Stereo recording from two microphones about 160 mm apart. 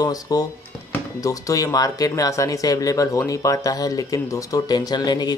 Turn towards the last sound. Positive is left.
turn(degrees=25)  # may be behind; listen again after turning